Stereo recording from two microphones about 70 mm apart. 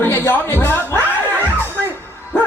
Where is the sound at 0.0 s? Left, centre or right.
Left.